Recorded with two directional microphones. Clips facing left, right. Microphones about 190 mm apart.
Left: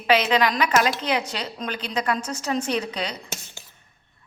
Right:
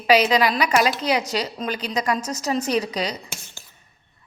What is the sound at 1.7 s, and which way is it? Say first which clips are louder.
A woman's voice: right 1 dB; 40° right (ahead or behind).